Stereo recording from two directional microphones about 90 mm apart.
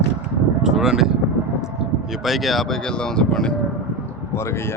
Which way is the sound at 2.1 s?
Centre (ahead or behind).